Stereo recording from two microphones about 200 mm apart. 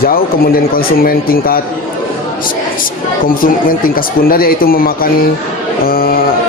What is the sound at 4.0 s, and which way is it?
Speech, 45° left (ahead or behind).